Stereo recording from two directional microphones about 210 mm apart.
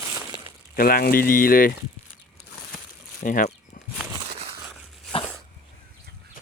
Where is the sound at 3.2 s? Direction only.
40° left (ahead or behind).